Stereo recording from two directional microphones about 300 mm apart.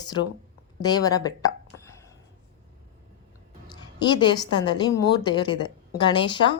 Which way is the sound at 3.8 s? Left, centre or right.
Centre.